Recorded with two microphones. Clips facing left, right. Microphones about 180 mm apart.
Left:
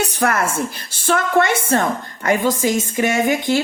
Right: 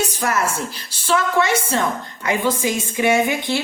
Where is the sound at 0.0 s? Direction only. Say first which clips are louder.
Left 2 dB; 60° left (ahead or behind).